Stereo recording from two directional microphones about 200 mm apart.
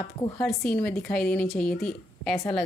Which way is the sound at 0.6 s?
5° left (ahead or behind).